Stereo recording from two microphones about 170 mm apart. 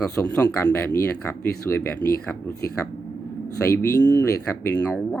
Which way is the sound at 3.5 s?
15° left (ahead or behind).